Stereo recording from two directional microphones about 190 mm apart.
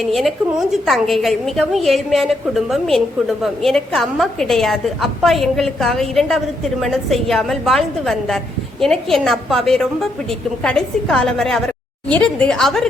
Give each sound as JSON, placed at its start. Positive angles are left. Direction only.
{"t": 0.0, "sound": "a woman's voice", "side_deg": 0}